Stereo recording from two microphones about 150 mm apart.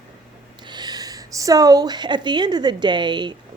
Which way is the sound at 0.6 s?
30° right (ahead or behind).